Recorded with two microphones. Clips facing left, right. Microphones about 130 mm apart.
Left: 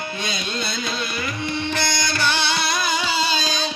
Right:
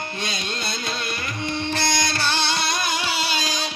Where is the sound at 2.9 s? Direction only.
5° right (ahead or behind).